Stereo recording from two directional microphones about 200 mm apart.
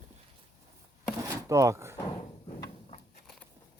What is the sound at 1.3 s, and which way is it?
Speech, 15° right (ahead or behind).